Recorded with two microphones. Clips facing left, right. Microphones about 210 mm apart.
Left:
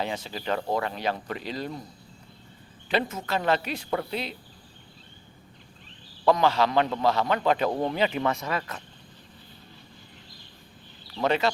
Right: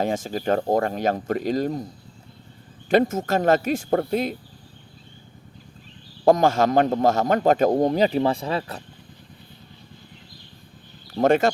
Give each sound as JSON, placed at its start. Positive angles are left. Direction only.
{"t": 0.0, "sound": "a man's voice", "side_deg": -45}
{"t": 2.9, "sound": "a man's voice", "side_deg": -45}
{"t": 6.2, "sound": "a man's voice", "side_deg": -45}
{"t": 11.1, "sound": "speech", "side_deg": -45}